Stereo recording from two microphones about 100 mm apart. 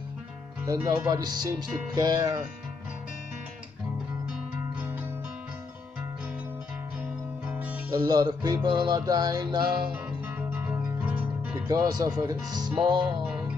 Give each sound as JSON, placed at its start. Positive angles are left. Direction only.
{"t": 0.7, "sound": "speech", "side_deg": -40}
{"t": 4.7, "sound": "music", "side_deg": -15}
{"t": 7.4, "sound": "music", "side_deg": -15}
{"t": 7.9, "sound": "music", "side_deg": -40}
{"t": 10.5, "sound": "music", "side_deg": -20}
{"t": 11.6, "sound": "speech", "side_deg": -40}
{"t": 12.5, "sound": "music", "side_deg": -45}